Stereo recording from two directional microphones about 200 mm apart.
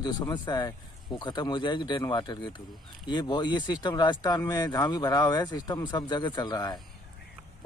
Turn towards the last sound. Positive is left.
turn(degrees=20)  # may be behind; listen again after turning